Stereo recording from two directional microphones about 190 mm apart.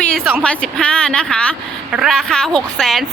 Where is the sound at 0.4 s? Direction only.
5° left (ahead or behind).